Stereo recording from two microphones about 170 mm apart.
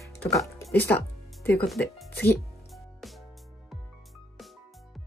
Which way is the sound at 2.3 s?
Centre (ahead or behind).